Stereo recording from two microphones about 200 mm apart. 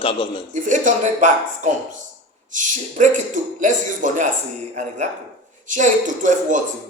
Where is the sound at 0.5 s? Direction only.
40° right (ahead or behind).